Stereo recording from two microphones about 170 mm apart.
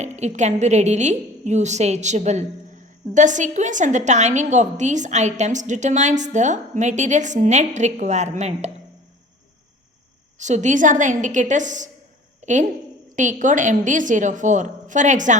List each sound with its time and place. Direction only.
0.0 s a woman's voice: 45° right (ahead or behind)
10.3 s a woman's voice: 45° right (ahead or behind)
12.4 s a sound: 45° right (ahead or behind)
13.1 s a woman's voice: 50° right (ahead or behind)